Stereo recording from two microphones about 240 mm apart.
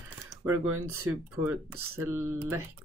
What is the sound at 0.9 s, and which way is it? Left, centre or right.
Speech, centre.